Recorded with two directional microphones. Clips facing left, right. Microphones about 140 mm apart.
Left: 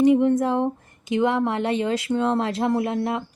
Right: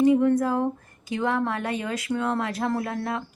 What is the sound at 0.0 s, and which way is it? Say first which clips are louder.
Speech: left 2 dB; 20° left (ahead or behind).